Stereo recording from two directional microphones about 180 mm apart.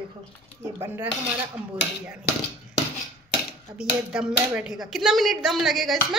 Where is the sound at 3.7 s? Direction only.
5° right (ahead or behind).